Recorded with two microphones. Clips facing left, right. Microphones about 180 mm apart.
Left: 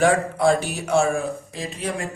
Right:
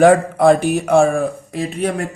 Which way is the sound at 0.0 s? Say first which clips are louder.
Right 7 dB; 55° right (ahead or behind).